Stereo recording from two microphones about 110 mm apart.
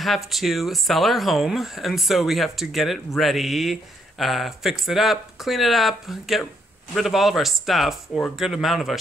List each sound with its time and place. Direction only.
0.0 s speech: centre (ahead or behind)